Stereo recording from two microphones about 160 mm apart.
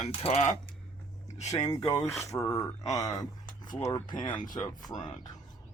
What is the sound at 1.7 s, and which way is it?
Speech, 30° left (ahead or behind).